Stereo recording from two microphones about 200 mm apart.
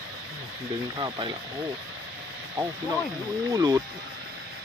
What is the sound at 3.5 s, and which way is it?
Speech, 20° right (ahead or behind).